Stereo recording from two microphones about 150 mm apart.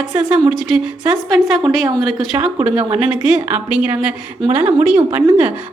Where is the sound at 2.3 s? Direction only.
20° right (ahead or behind).